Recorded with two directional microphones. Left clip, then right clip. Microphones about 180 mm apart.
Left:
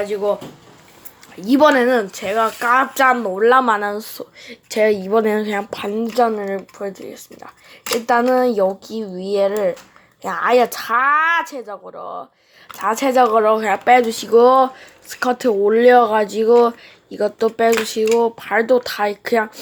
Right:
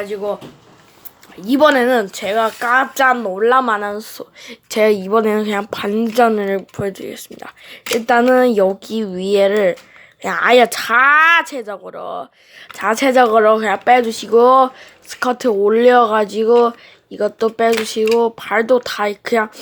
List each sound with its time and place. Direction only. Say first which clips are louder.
0.0 s speech: left 2 dB; centre (ahead or behind)
1.4 s speech: right 1 dB; centre (ahead or behind); by 7.8 s 30° right (ahead or behind)
7.9 s a woman's voice: right 3 dB; 20° right (ahead or behind)